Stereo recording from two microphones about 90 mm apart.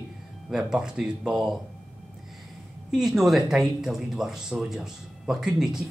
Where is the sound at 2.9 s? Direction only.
5° right (ahead or behind).